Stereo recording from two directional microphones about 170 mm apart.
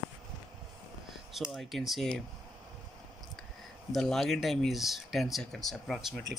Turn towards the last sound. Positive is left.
turn(degrees=0)  # may be behind; listen again after turning